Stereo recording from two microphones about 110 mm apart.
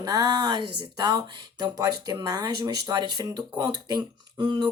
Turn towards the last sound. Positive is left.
turn(degrees=-40)  # may be behind; listen again after turning